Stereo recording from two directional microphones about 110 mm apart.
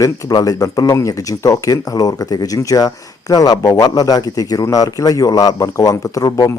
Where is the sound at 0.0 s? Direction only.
35° left (ahead or behind).